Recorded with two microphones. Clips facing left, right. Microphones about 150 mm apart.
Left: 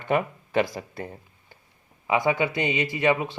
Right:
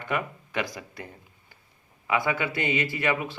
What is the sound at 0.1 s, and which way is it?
Speech, 30° left (ahead or behind).